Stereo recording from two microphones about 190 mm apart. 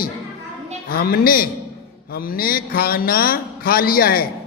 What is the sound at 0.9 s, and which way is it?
Mantra, 55° left (ahead or behind).